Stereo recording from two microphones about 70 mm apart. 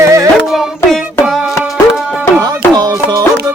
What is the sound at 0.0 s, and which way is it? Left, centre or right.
Music, right.